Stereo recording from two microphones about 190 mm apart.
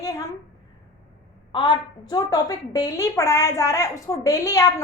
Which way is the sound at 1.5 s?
25° left (ahead or behind).